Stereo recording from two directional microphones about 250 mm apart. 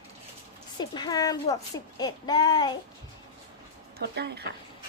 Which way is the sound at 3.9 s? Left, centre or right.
Right.